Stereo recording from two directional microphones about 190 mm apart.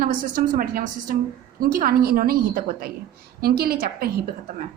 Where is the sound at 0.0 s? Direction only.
45° right (ahead or behind).